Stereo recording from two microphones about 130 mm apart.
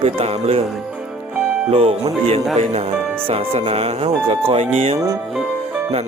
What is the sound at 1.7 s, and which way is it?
Speech, 45° right (ahead or behind).